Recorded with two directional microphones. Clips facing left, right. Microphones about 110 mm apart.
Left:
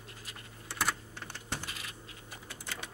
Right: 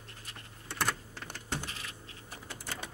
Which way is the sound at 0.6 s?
Centre (ahead or behind).